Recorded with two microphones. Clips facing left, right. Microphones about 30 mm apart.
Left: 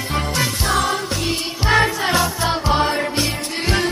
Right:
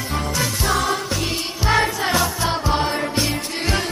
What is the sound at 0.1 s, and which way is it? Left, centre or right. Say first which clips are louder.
Music: left 2 dB; left.